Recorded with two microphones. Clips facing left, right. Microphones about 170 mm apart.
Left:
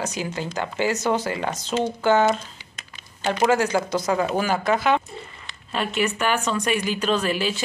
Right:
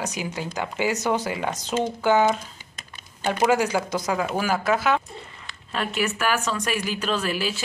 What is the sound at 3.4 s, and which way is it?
Speech, 10° right (ahead or behind).